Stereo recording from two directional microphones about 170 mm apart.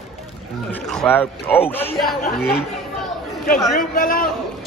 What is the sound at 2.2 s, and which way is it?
Speech, 65° left (ahead or behind).